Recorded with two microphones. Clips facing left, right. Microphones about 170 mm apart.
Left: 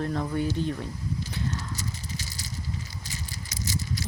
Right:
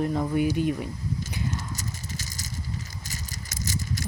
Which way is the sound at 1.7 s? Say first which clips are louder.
Even; 45° right (ahead or behind).